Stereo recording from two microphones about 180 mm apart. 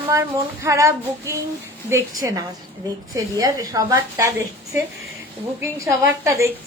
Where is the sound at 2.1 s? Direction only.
20° right (ahead or behind).